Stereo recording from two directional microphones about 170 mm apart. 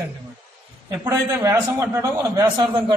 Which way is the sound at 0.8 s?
20° right (ahead or behind).